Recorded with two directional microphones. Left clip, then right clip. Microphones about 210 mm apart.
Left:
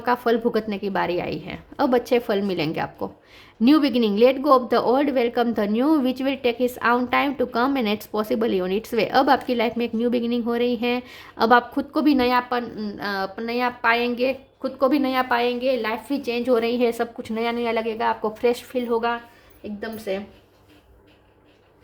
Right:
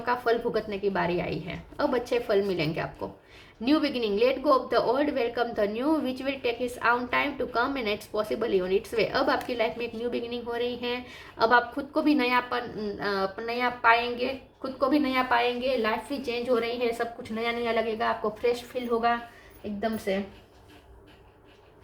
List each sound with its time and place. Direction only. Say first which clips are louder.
0.0 s a woman's voice: left 5 dB; 45° left (ahead or behind)